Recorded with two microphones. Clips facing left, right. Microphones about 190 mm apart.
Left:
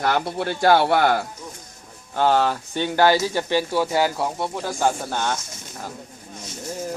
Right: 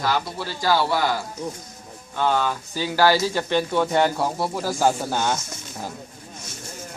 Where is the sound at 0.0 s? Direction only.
60° left (ahead or behind).